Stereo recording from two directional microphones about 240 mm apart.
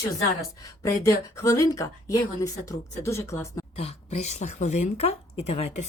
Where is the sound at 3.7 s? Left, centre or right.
Left.